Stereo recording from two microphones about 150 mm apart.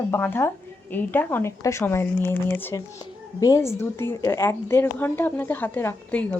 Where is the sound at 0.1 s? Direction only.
15° left (ahead or behind).